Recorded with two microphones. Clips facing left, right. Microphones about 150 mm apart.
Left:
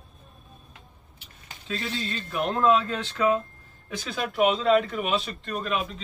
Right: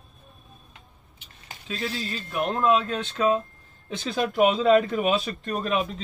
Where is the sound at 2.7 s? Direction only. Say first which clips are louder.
Right 1 dB; 20° right (ahead or behind).